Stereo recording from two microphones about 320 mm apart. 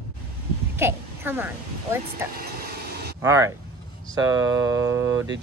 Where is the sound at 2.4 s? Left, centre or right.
Right.